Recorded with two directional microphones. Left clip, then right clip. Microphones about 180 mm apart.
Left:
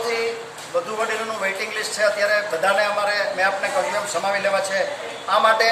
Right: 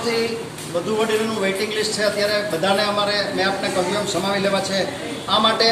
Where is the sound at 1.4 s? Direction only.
Centre (ahead or behind).